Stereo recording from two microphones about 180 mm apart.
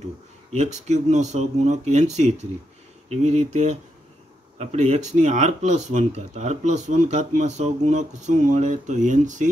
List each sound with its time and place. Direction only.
0.5 s speech: 40° right (ahead or behind)